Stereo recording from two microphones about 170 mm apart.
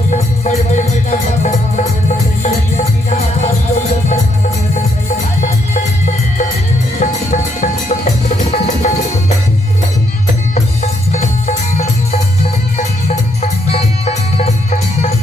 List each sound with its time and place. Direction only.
2.4 s music: 40° left (ahead or behind)
7.0 s music: 45° left (ahead or behind)
11.1 s music: 40° left (ahead or behind)